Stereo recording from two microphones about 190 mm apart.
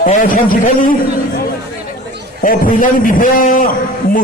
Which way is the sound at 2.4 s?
45° left (ahead or behind).